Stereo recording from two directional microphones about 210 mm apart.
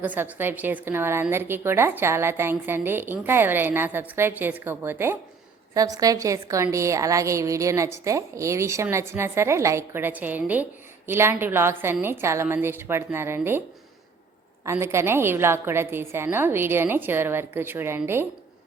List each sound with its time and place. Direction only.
0.0 s a woman's voice: 5° right (ahead or behind)
14.6 s a woman's voice: 15° right (ahead or behind)